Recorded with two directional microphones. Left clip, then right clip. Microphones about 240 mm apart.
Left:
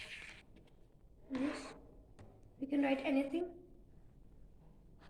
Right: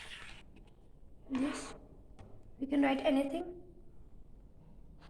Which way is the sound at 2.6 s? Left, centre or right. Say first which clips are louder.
Right 5 dB; right.